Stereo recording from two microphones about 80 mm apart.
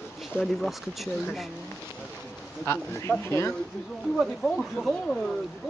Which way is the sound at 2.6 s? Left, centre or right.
Left.